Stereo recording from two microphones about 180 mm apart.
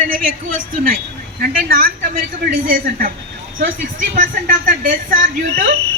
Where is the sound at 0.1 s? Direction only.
50° right (ahead or behind).